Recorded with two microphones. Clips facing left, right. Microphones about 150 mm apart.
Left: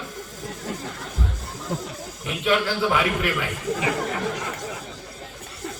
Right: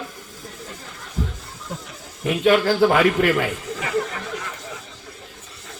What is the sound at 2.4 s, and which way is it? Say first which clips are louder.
A man's voice: right 6 dB; 50° right (ahead or behind).